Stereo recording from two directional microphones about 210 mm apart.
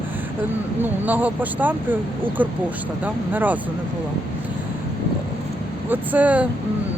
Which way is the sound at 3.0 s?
10° right (ahead or behind).